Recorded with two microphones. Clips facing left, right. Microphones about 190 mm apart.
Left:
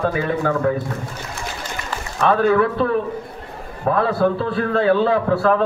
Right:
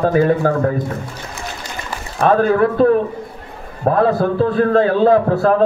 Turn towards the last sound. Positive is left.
turn(degrees=-40)  # may be behind; listen again after turning